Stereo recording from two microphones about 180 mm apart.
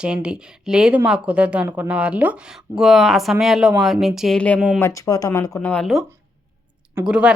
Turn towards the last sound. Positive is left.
turn(degrees=-5)  # may be behind; listen again after turning